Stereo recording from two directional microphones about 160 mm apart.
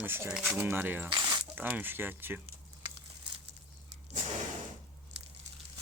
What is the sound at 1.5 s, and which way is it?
Speech, 10° right (ahead or behind).